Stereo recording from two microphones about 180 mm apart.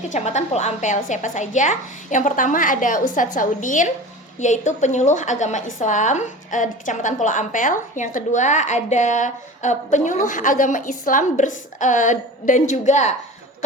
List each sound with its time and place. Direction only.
0.1 s a woman's voice: 40° left (ahead or behind)